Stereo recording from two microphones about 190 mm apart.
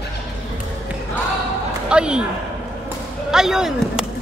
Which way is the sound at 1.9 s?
5° right (ahead or behind).